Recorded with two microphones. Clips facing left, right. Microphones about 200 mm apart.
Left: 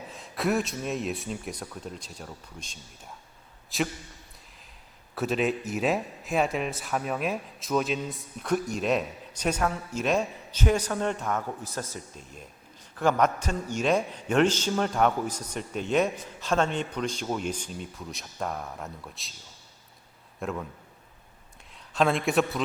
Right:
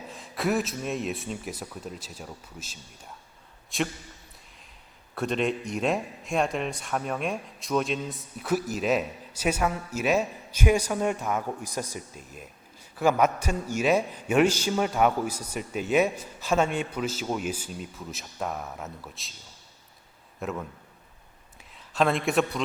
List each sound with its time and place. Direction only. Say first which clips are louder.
0.1 s a man's voice: even; centre (ahead or behind)
5.1 s a man's voice: even; 5° left (ahead or behind)
20.4 s a man's voice: even; centre (ahead or behind)